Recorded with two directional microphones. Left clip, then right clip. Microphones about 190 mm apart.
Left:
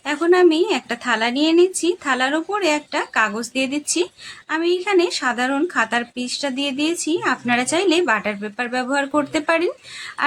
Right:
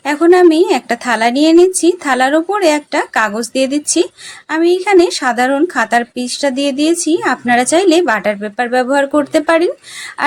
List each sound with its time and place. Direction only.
0.0 s a woman's voice: 25° right (ahead or behind)